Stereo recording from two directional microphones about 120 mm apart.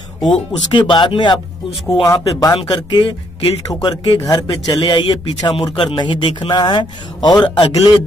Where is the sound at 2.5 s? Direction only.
40° left (ahead or behind).